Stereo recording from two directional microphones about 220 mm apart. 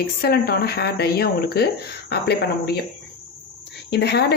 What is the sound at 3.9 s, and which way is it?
Speech, 50° left (ahead or behind).